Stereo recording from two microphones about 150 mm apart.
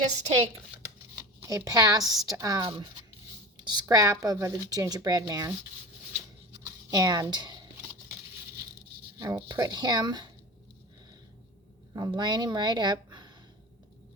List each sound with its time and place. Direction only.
1.1 s speech: 15° right (ahead or behind)
2.6 s speech: 35° right (ahead or behind)
6.7 s speech: 25° right (ahead or behind)
9.1 s speech: 20° right (ahead or behind)
11.9 s a woman's voice: 25° right (ahead or behind)